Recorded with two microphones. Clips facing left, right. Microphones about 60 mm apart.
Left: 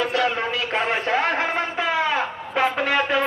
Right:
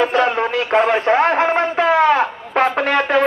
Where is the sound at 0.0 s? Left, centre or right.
Right.